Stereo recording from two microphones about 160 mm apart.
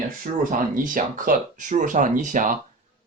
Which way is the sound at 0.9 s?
55° right (ahead or behind).